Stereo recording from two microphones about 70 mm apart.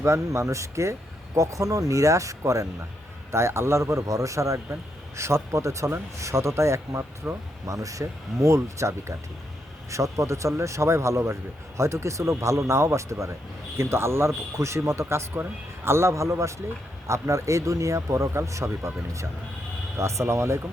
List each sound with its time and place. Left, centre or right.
0.0 s a man's voice: right
7.2 s speech: right
7.7 s a man's voice: right